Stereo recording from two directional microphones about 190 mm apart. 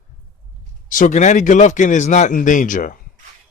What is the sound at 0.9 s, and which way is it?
Speech, 45° left (ahead or behind).